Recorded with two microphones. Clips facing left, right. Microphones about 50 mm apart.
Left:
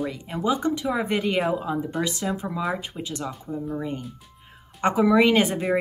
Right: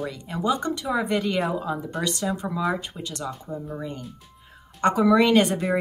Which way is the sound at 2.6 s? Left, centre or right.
Centre.